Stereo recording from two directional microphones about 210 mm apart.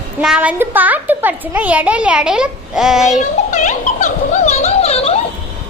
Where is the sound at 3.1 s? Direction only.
35° left (ahead or behind).